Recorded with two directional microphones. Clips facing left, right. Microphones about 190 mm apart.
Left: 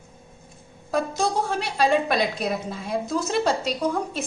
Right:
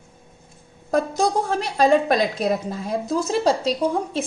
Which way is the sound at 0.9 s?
40° right (ahead or behind).